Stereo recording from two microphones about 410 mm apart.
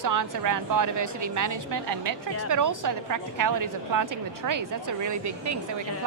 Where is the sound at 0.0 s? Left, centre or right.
Right.